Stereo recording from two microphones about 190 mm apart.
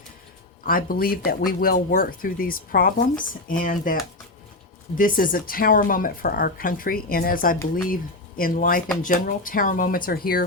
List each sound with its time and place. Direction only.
0.6 s speech: 50° left (ahead or behind)
4.9 s speech: 45° left (ahead or behind)